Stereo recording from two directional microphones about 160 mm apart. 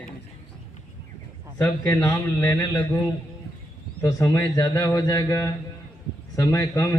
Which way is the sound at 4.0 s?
20° left (ahead or behind).